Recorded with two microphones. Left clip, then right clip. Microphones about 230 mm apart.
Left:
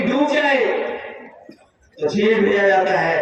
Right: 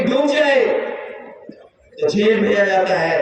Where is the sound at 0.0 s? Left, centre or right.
Right.